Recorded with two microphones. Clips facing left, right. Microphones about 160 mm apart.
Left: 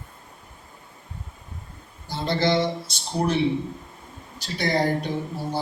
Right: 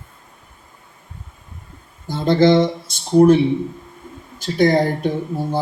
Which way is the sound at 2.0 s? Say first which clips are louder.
Right 9 dB; 50° right (ahead or behind).